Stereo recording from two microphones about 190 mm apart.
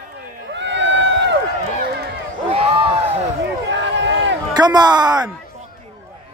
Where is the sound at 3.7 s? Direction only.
70° right (ahead or behind).